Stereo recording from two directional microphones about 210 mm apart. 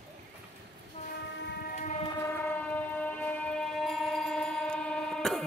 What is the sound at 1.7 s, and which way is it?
Train, 35° left (ahead or behind).